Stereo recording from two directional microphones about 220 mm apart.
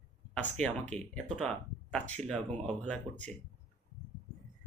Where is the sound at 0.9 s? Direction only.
30° right (ahead or behind).